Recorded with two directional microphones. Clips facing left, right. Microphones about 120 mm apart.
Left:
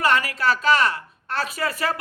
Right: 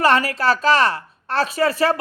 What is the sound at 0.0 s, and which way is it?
A man's voice, 35° right (ahead or behind).